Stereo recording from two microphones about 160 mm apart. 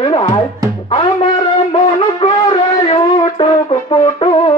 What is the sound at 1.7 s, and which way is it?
Shofar, 30° left (ahead or behind).